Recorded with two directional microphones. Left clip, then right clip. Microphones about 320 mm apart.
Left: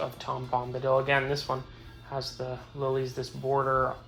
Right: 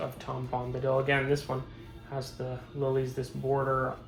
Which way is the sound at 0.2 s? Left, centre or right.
Centre.